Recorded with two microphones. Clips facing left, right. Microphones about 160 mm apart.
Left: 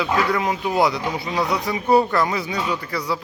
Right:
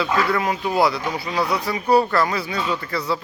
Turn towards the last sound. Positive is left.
turn(degrees=10)  # may be behind; listen again after turning